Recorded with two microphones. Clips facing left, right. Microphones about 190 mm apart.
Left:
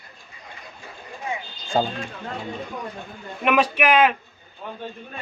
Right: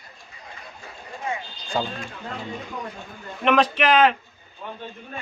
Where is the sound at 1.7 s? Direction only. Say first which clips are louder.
Left 4 dB; 45° left (ahead or behind).